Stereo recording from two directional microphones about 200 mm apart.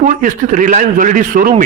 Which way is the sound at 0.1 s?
40° right (ahead or behind).